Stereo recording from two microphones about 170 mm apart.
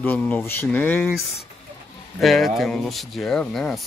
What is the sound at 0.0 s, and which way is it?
Speech, 10° left (ahead or behind).